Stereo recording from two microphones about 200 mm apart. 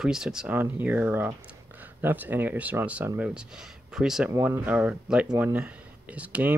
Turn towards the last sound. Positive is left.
turn(degrees=-5)  # may be behind; listen again after turning